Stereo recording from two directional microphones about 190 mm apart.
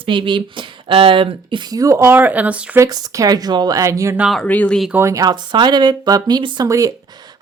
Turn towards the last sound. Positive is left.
turn(degrees=-20)  # may be behind; listen again after turning